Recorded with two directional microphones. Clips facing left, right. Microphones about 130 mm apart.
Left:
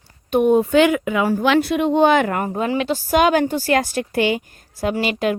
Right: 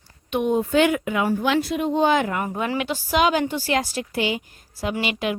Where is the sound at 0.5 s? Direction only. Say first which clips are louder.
Left 2 dB; 85° left; by 2.4 s 60° left (ahead or behind).